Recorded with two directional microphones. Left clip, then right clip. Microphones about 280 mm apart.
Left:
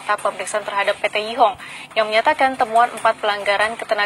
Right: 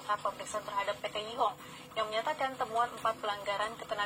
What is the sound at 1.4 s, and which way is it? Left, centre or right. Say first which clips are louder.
A woman's voice: left 16 dB; left.